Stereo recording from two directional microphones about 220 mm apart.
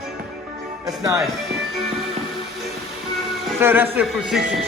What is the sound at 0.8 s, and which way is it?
Speech, 15° right (ahead or behind).